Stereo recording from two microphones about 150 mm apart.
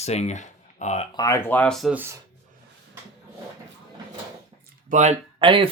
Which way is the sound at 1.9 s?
15° right (ahead or behind).